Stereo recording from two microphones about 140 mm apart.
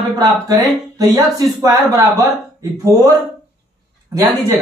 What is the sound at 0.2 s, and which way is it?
Speech, 25° right (ahead or behind).